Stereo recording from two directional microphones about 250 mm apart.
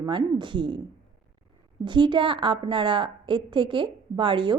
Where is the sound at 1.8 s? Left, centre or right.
Centre.